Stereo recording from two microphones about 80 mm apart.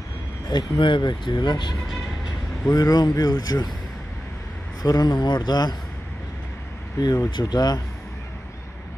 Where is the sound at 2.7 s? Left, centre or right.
Left.